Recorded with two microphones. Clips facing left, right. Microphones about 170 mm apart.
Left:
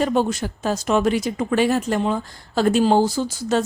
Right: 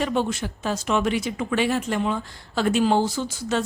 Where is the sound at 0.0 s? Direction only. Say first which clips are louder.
Left 4 dB; 40° left (ahead or behind).